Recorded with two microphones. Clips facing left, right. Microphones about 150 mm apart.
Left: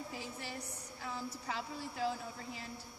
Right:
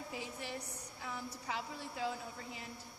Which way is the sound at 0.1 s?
20° right (ahead or behind).